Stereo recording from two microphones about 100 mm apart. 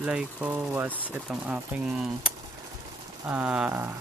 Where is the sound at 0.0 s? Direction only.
10° right (ahead or behind).